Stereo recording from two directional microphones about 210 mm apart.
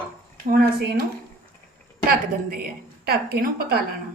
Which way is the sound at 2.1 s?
45° right (ahead or behind).